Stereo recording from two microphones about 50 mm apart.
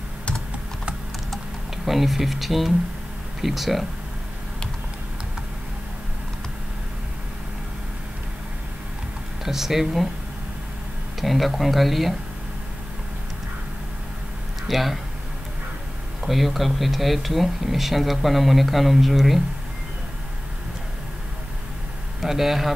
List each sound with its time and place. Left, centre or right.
1.9 s speech: centre
9.4 s speech: centre
11.1 s speech: centre
14.7 s speech: centre
16.2 s speech: centre
22.2 s speech: centre